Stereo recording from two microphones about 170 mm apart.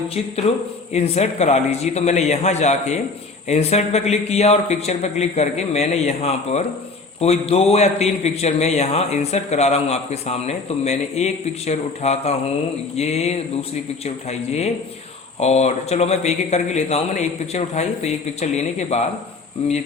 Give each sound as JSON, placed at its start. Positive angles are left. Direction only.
{"t": 0.9, "sound": "a man's voice", "side_deg": 40}